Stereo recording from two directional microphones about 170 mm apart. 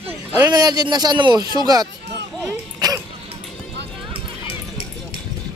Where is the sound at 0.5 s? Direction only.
25° right (ahead or behind).